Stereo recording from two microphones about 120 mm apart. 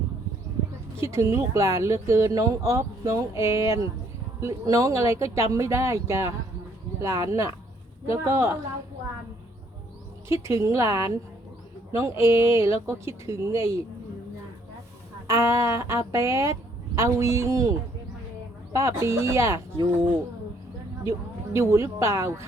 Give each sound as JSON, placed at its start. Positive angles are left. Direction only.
{"t": 1.0, "sound": "speech", "side_deg": -25}
{"t": 10.4, "sound": "a man's voice", "side_deg": -25}
{"t": 15.3, "sound": "speech", "side_deg": -25}
{"t": 21.0, "sound": "speech", "side_deg": -25}